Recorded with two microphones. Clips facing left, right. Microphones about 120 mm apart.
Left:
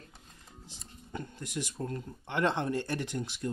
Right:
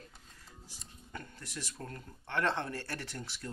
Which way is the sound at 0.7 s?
20° left (ahead or behind).